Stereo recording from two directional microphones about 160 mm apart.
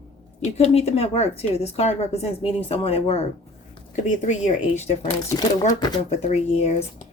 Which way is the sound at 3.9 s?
50° left (ahead or behind).